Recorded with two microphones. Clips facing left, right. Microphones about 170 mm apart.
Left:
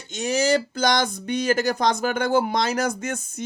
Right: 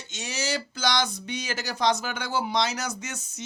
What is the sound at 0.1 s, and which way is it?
Speech, 50° left (ahead or behind).